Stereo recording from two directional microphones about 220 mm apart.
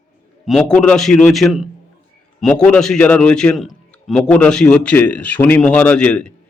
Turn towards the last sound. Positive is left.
turn(degrees=5)  # may be behind; listen again after turning